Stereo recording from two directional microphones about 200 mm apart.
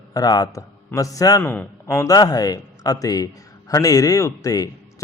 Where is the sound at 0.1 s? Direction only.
20° left (ahead or behind).